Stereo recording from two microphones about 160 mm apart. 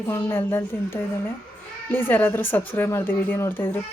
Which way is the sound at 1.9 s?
15° left (ahead or behind).